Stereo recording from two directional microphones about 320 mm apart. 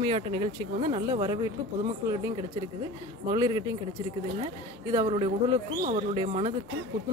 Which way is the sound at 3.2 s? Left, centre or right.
Centre.